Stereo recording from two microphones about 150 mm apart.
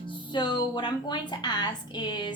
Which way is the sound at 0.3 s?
30° left (ahead or behind).